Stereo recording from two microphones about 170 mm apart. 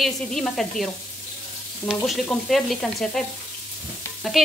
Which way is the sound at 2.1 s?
Centre (ahead or behind).